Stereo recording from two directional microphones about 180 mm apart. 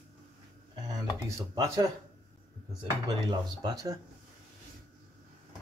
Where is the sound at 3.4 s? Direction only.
20° right (ahead or behind).